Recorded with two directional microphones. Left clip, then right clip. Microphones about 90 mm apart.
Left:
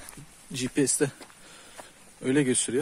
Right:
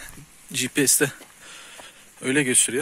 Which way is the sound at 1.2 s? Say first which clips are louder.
Right 5 dB; 15° left (ahead or behind).